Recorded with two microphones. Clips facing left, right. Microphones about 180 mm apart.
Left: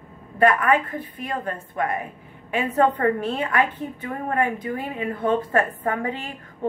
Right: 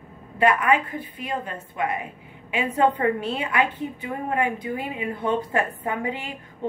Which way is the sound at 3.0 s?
45° left (ahead or behind).